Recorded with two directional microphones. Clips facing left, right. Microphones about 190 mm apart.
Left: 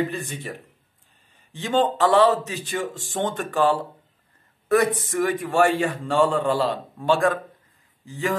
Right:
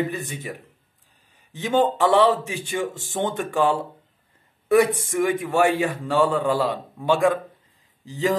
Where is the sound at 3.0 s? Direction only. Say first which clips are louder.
Right 1 dB; 20° right (ahead or behind).